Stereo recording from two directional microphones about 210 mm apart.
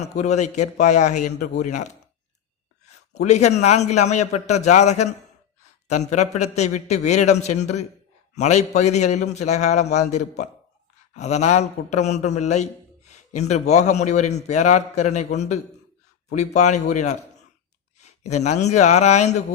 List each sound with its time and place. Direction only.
0.0 s a man's voice: 35° left (ahead or behind)
6.1 s a man's voice: 35° left (ahead or behind)
18.0 s a sound: 35° left (ahead or behind)
18.6 s a man's voice: 35° left (ahead or behind)